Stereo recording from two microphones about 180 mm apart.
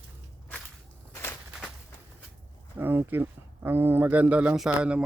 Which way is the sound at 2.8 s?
10° right (ahead or behind).